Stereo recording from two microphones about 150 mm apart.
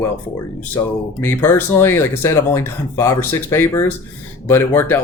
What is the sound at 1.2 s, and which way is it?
Speech, 15° left (ahead or behind).